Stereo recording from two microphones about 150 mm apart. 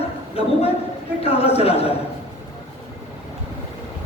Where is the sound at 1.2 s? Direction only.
40° left (ahead or behind).